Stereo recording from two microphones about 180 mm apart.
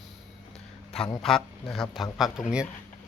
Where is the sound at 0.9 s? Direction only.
Centre (ahead or behind).